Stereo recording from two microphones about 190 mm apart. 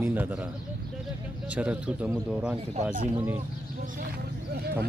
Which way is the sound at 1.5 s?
5° right (ahead or behind).